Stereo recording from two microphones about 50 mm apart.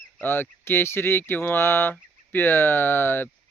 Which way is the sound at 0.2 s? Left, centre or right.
Left.